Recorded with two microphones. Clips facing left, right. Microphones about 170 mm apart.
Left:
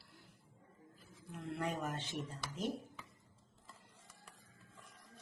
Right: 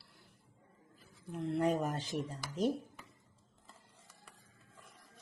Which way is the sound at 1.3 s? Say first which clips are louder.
Right 8 dB; 40° right (ahead or behind).